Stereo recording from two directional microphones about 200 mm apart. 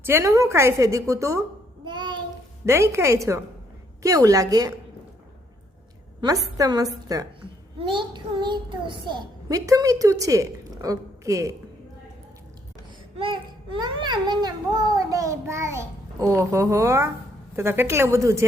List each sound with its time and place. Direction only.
0.0 s a woman's voice: 10° right (ahead or behind)
6.6 s speech: 20° right (ahead or behind)
13.1 s speech: 25° right (ahead or behind)